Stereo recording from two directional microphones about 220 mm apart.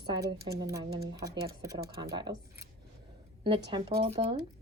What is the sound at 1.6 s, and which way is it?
A woman's voice, 15° right (ahead or behind).